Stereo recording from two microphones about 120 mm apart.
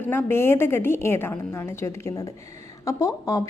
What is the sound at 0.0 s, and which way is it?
A woman's voice, 15° left (ahead or behind).